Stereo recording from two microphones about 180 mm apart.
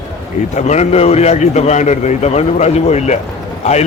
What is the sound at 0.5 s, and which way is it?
A man's voice, 40° left (ahead or behind).